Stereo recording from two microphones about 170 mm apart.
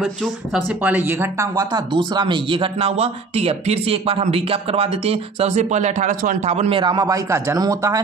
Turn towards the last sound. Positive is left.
turn(degrees=-20)  # may be behind; listen again after turning